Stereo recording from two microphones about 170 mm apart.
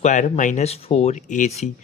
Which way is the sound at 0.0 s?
45° left (ahead or behind).